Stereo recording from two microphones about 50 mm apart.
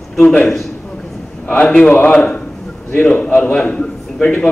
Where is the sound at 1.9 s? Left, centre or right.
Left.